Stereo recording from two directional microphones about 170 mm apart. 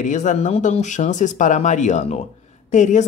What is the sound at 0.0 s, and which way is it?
A woman's voice, 45° left (ahead or behind).